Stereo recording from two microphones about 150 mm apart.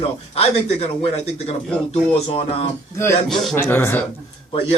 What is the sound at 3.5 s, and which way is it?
Speech, 15° left (ahead or behind).